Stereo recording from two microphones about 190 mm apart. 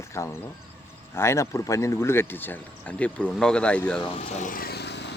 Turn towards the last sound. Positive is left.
turn(degrees=65)  # may be behind; listen again after turning